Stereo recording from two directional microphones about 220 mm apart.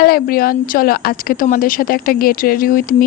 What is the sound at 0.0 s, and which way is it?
Speech, 45° left (ahead or behind).